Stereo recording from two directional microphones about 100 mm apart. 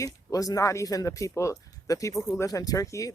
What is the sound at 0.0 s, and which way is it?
Speech, 35° left (ahead or behind).